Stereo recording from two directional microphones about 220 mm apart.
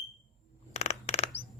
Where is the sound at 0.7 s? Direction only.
30° left (ahead or behind).